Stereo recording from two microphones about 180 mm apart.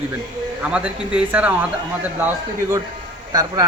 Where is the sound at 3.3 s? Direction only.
20° right (ahead or behind).